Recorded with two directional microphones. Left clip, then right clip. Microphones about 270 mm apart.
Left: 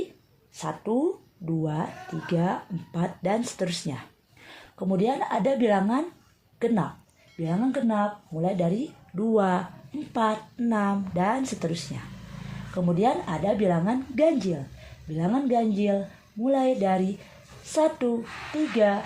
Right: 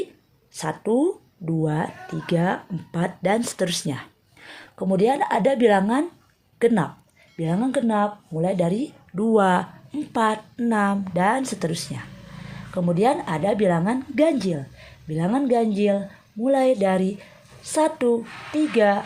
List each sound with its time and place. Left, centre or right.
0.5 s speech: right